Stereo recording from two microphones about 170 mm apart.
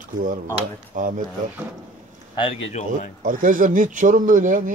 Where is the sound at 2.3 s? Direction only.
30° left (ahead or behind).